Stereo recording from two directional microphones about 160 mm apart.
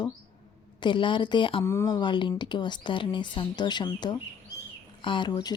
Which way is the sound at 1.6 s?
15° left (ahead or behind).